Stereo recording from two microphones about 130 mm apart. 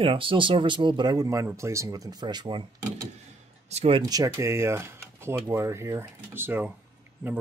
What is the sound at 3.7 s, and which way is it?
Speech, 50° right (ahead or behind).